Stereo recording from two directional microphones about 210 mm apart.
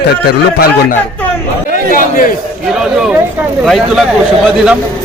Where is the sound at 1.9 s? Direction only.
40° left (ahead or behind).